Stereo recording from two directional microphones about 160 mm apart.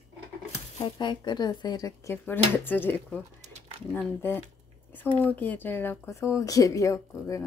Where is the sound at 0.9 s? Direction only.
30° left (ahead or behind).